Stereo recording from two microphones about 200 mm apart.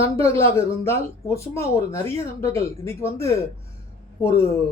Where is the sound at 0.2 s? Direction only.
15° left (ahead or behind).